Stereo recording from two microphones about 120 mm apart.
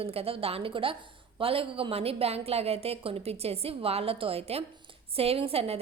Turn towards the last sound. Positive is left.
turn(degrees=-55)  # may be behind; listen again after turning